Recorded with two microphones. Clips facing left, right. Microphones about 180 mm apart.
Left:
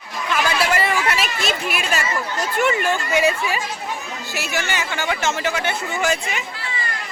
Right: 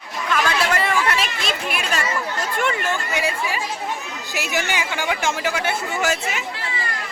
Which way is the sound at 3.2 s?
20° left (ahead or behind).